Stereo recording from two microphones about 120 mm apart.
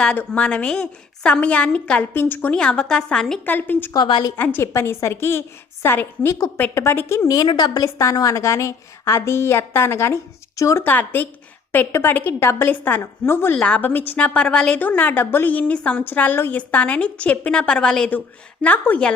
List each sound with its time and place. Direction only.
0.0 s a woman's voice: 10° left (ahead or behind)
3.9 s a woman's voice: 35° left (ahead or behind)
4.4 s a woman's voice: 15° left (ahead or behind)
10.8 s a woman's voice: 15° left (ahead or behind)